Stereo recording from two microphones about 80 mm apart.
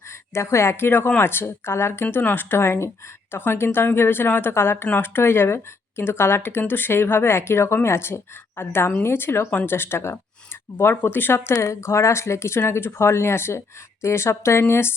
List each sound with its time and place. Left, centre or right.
0.1 s speech: left